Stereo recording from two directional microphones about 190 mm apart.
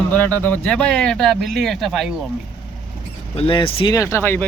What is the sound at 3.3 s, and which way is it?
Speech, 30° left (ahead or behind).